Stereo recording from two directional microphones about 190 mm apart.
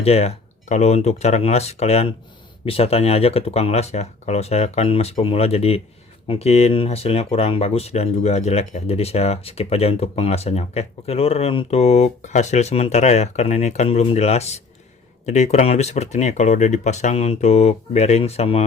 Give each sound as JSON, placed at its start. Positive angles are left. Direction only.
{"t": 0.0, "sound": "speech", "side_deg": 35}